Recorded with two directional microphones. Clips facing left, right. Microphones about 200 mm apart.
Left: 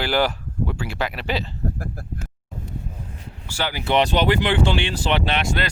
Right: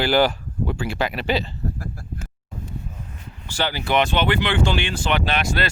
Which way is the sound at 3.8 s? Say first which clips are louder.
Left 2 dB; 35° left (ahead or behind).